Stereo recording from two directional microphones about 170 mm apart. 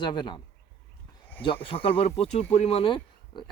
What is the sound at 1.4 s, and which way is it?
A man's voice, 30° left (ahead or behind).